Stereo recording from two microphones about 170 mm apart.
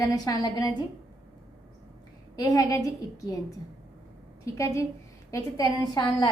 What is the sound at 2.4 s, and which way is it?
A woman's voice, 20° left (ahead or behind).